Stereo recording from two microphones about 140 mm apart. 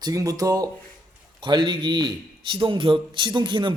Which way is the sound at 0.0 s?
25° right (ahead or behind).